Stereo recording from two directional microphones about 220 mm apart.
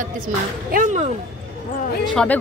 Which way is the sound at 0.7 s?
35° right (ahead or behind).